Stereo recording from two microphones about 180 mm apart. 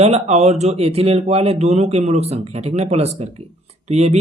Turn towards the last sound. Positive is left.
turn(degrees=-35)  # may be behind; listen again after turning